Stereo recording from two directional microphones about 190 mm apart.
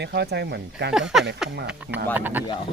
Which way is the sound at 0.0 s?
60° right (ahead or behind).